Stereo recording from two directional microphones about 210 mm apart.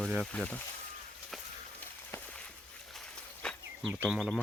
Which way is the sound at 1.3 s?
5° left (ahead or behind).